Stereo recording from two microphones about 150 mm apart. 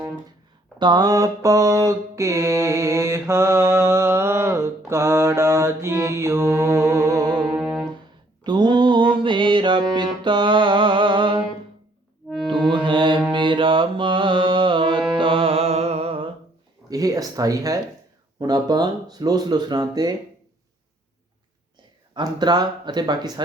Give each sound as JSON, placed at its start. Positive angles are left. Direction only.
{"t": 0.8, "sound": "mantra", "side_deg": -25}
{"t": 7.5, "sound": "music", "side_deg": -5}
{"t": 8.4, "sound": "mantra", "side_deg": -30}
{"t": 10.2, "sound": "music", "side_deg": -30}
{"t": 12.5, "sound": "music", "side_deg": -30}
{"t": 16.9, "sound": "a sound", "side_deg": -25}
{"t": 18.3, "sound": "mantra", "side_deg": -25}
{"t": 22.1, "sound": "mantra", "side_deg": -30}